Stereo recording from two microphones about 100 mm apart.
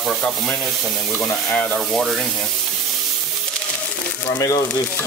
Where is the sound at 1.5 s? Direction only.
15° left (ahead or behind).